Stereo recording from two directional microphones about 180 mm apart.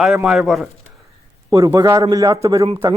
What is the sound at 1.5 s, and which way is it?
Speech, 15° right (ahead or behind).